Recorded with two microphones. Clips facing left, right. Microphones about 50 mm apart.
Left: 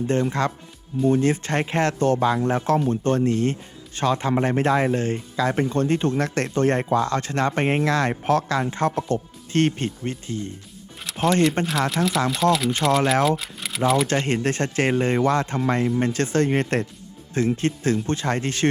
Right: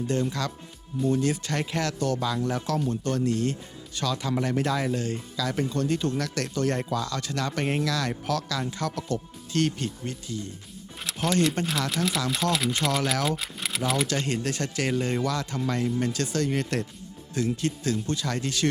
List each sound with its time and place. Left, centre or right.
0.1 s speech: left
11.0 s a sound: centre
11.6 s speech: left
12.3 s speech: centre
14.1 s speech: left